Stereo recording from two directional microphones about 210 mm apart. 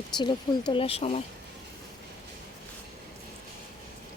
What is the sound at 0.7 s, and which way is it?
Speech, 25° left (ahead or behind).